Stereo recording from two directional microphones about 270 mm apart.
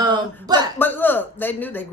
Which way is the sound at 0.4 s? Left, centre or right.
Centre.